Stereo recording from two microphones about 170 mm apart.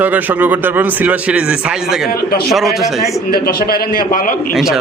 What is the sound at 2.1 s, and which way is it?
Speech, 65° left (ahead or behind).